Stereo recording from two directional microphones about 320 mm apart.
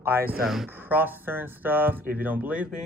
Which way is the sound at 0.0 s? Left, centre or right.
Centre.